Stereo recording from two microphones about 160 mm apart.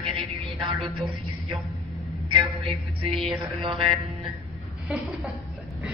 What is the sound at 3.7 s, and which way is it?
Speech, 35° right (ahead or behind).